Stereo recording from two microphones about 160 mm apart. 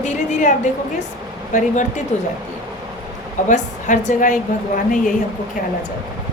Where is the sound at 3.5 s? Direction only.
50° left (ahead or behind).